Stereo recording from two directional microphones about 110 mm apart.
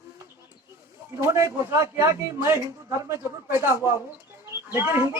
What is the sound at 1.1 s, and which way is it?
A man's voice, 25° right (ahead or behind).